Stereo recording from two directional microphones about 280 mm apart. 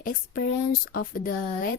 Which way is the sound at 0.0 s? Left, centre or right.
Left.